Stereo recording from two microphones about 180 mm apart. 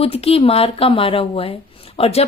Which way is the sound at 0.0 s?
35° left (ahead or behind).